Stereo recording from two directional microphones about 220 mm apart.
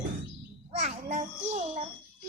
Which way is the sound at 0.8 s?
30° right (ahead or behind).